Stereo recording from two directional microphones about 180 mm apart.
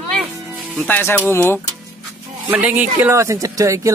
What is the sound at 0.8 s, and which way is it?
Speech, 10° left (ahead or behind).